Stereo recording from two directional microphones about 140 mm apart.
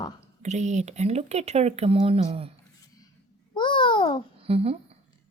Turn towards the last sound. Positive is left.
turn(degrees=-45)  # may be behind; listen again after turning